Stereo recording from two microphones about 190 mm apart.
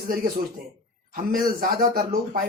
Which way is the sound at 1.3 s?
50° right (ahead or behind).